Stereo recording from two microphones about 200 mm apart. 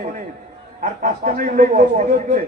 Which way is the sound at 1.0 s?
40° right (ahead or behind).